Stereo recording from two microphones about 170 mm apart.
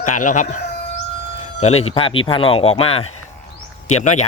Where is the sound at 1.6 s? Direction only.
40° left (ahead or behind).